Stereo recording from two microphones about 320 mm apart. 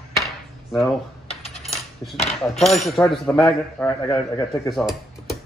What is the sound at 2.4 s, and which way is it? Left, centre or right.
Speech, centre.